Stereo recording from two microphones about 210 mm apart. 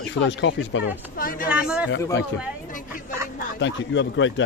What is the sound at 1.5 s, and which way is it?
Speech, 5° right (ahead or behind).